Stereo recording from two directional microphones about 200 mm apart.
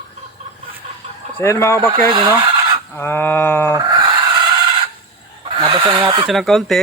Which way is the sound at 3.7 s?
20° right (ahead or behind).